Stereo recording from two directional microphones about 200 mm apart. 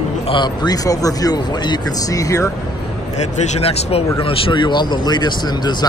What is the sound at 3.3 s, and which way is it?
A man's voice, 35° left (ahead or behind).